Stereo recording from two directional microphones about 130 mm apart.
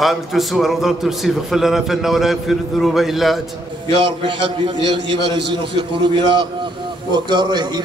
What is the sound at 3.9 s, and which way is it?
A man's voice, 40° right (ahead or behind).